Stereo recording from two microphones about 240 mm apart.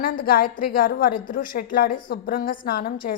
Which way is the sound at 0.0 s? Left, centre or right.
Left.